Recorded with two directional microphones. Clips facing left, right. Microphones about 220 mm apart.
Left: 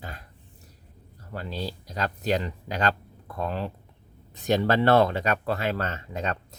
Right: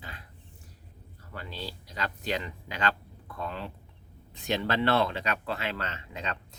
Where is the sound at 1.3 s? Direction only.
40° left (ahead or behind).